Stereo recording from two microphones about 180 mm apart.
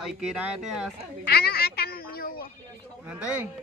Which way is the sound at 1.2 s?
60° left (ahead or behind).